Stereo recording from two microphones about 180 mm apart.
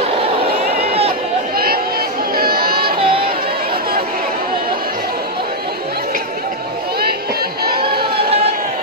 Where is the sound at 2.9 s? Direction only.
30° right (ahead or behind).